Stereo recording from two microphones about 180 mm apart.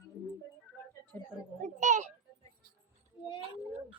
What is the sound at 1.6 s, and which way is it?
Children playing, 40° right (ahead or behind).